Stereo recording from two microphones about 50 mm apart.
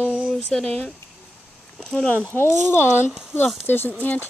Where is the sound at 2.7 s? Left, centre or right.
Left.